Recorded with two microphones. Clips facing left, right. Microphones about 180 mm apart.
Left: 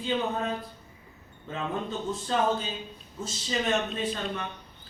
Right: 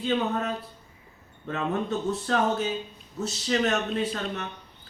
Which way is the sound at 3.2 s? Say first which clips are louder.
Right 6 dB; 70° right (ahead or behind).